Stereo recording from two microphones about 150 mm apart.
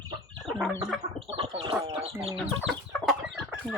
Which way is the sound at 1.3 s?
40° right (ahead or behind).